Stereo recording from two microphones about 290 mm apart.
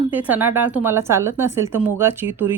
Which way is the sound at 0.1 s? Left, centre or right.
Centre.